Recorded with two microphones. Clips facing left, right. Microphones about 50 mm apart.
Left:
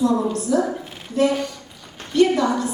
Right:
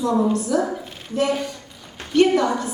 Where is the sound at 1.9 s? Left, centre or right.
Right.